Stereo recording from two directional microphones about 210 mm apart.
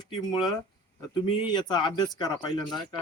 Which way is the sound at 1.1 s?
20° left (ahead or behind).